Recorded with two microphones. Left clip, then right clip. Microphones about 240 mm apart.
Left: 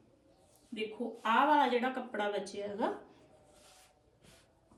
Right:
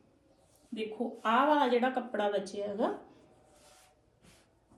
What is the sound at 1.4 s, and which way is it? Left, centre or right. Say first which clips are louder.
A woman's voice: right 1 dB; centre.